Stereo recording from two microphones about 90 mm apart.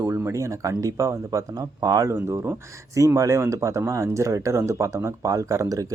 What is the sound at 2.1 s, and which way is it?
Speech, 25° right (ahead or behind).